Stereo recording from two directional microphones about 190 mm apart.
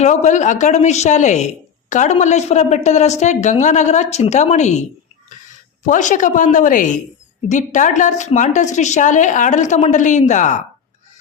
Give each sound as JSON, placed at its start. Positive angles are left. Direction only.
{"t": 0.0, "sound": "a woman's voice", "side_deg": 40}